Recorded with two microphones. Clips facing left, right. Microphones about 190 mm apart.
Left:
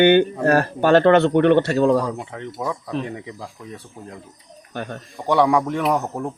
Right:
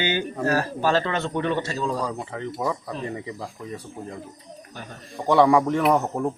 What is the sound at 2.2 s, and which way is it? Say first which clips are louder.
A man's voice: even; centre (ahead or behind).